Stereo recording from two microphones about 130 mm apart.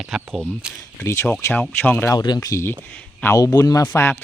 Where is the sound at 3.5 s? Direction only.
25° left (ahead or behind).